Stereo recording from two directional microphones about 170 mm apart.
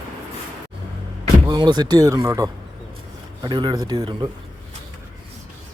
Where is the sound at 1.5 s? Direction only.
25° right (ahead or behind).